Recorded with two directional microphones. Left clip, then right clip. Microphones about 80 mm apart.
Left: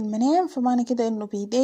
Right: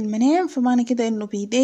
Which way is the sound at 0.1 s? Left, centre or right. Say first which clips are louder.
Right 2 dB; left.